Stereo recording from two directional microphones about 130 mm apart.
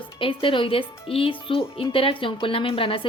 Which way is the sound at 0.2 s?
40° left (ahead or behind).